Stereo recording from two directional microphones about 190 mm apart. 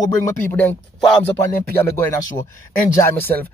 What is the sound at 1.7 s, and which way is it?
A man's voice, 10° left (ahead or behind).